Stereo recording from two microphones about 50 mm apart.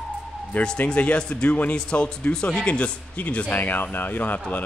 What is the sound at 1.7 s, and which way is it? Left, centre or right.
Speech, centre.